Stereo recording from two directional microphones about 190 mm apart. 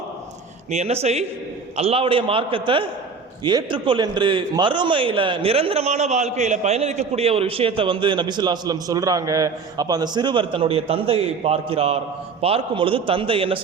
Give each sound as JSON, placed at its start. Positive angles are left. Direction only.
{"t": 0.7, "sound": "a man's voice", "side_deg": -35}